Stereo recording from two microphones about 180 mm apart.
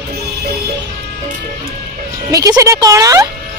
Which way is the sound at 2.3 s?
20° right (ahead or behind).